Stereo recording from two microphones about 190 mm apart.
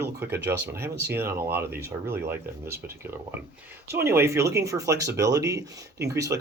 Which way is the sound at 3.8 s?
15° right (ahead or behind).